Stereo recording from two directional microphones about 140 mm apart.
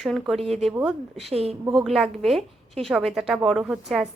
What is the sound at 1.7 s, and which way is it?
Speech, centre (ahead or behind).